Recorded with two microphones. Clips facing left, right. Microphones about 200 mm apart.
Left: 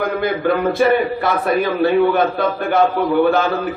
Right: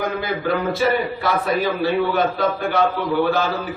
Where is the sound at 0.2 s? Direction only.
55° left (ahead or behind).